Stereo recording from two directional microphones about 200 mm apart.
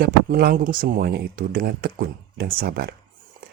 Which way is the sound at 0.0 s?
50° right (ahead or behind).